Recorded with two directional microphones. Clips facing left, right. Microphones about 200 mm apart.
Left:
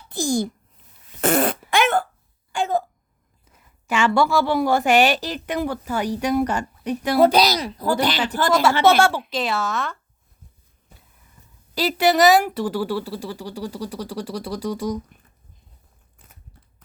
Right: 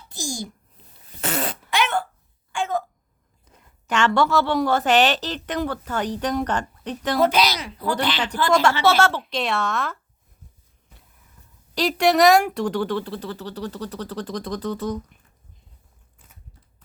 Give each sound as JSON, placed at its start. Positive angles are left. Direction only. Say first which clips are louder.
{"t": 0.1, "sound": "babbling", "louder": "left 10 dB", "side_deg": 60}
{"t": 1.2, "sound": "fart", "louder": "left 8 dB", "side_deg": 55}
{"t": 1.7, "sound": "a sound", "louder": "left 3 dB", "side_deg": 50}
{"t": 2.5, "sound": "a sound", "louder": "left 3 dB", "side_deg": 35}
{"t": 3.8, "sound": "a woman's voice", "louder": "left 1 dB", "side_deg": 10}
{"t": 7.2, "sound": "speech", "louder": "left 4 dB", "side_deg": 35}
{"t": 8.8, "sound": "a woman's voice", "louder": "left 3 dB", "side_deg": 15}
{"t": 9.3, "sound": "speech", "louder": "even", "side_deg": 0}
{"t": 11.7, "sound": "a woman's voice", "louder": "even", "side_deg": 5}